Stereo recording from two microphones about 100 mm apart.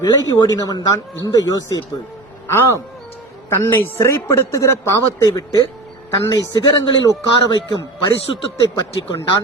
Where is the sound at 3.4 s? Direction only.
25° left (ahead or behind); by 6.9 s 50° left (ahead or behind).